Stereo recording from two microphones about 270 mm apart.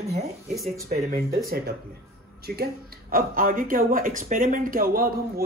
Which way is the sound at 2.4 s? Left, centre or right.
Right.